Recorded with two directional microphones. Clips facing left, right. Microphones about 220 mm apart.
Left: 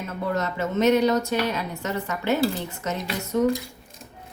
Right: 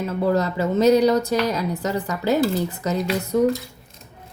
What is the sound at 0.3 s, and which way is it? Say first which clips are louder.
A woman's voice: right 5 dB; 35° right (ahead or behind).